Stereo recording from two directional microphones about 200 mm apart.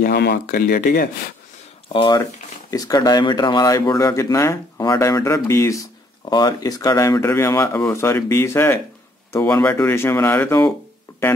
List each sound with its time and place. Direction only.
0.0 s speech: 55° left (ahead or behind)
1.9 s speech: 25° left (ahead or behind)
11.1 s music: 15° left (ahead or behind)